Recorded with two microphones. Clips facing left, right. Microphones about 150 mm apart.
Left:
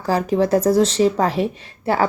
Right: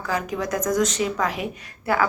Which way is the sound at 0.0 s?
35° left (ahead or behind).